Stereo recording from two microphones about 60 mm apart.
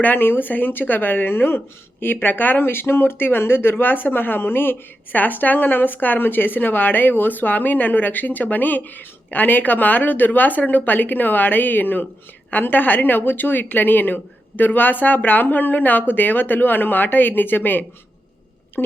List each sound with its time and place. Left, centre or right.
0.0 s speech: left